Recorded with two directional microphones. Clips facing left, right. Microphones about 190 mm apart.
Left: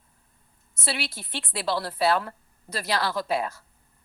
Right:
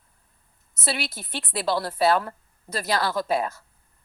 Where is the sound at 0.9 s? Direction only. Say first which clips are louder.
Right 2 dB; 45° right (ahead or behind).